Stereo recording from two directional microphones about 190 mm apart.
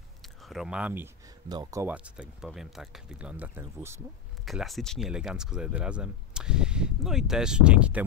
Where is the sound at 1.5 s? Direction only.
20° right (ahead or behind).